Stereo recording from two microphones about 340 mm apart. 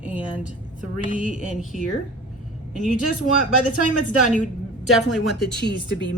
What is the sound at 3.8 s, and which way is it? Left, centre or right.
Speech, left.